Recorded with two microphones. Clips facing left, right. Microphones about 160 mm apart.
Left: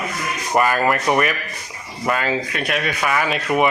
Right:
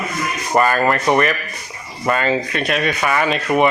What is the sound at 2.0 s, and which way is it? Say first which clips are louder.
Speech: right 3 dB; 5° left (ahead or behind).